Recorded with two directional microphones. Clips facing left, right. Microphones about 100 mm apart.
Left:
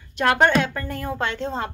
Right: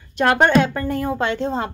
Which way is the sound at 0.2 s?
30° right (ahead or behind).